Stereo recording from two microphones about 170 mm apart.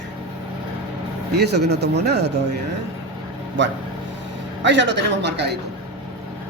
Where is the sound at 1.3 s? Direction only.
75° right (ahead or behind).